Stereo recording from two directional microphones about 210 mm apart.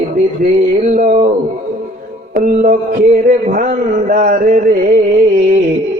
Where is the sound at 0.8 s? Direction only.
35° right (ahead or behind).